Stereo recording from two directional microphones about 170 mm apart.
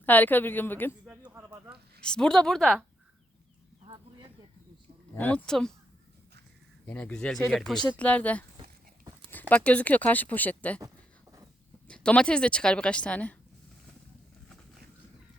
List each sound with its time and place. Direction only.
0.0 s speech: 10° left (ahead or behind)
1.0 s speech: 10° right (ahead or behind)
2.0 s a woman's voice: 5° left (ahead or behind)
5.1 s speech: 10° left (ahead or behind)
6.8 s a woman's voice: 5° left (ahead or behind)
10.8 s a sound: 20° right (ahead or behind)
11.9 s a woman's voice: 5° left (ahead or behind)